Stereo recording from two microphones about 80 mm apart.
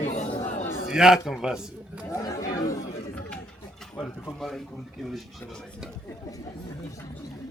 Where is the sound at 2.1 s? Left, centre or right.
Left.